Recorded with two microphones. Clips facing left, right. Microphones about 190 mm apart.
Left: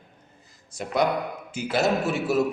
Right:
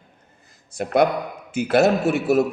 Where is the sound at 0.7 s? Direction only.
55° right (ahead or behind).